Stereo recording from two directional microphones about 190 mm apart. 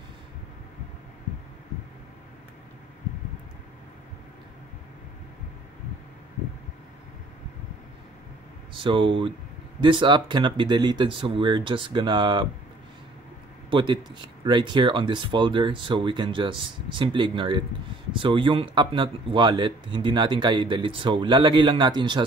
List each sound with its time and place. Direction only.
8.7 s speech: 25° right (ahead or behind)
13.7 s speech: 25° right (ahead or behind)